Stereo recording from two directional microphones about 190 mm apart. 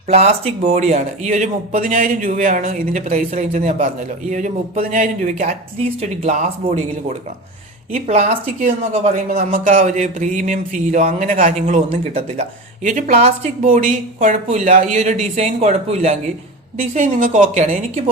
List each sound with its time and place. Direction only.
0.1 s a man's voice: 35° right (ahead or behind)